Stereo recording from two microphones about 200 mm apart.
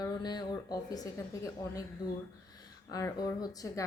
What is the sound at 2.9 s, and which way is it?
Speech, 15° left (ahead or behind).